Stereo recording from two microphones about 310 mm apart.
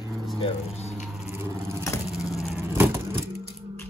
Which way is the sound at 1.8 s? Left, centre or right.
Centre.